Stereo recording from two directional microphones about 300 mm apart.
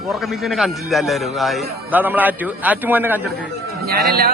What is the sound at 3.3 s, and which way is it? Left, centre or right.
Speech, right.